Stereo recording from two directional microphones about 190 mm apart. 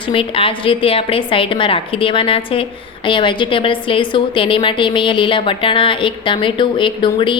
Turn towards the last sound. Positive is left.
turn(degrees=25)  # may be behind; listen again after turning